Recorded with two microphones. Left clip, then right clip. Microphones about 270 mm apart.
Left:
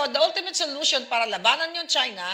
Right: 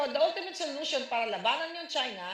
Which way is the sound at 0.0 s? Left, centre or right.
Left.